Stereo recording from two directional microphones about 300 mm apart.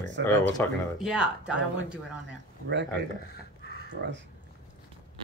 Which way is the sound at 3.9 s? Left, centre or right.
Right.